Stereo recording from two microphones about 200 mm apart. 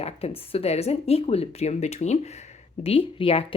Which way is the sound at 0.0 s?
30° left (ahead or behind).